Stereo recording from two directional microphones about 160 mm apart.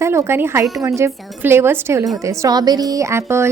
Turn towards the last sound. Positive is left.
turn(degrees=-15)  # may be behind; listen again after turning